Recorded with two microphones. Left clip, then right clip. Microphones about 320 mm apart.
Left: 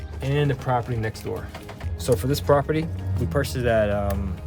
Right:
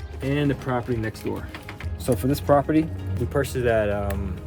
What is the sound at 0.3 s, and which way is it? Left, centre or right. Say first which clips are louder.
Speech: left 1 dB; centre.